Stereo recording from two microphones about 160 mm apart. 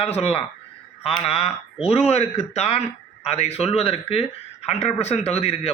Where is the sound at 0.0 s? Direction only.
40° left (ahead or behind).